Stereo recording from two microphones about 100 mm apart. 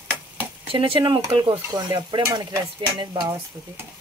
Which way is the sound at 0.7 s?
60° right (ahead or behind).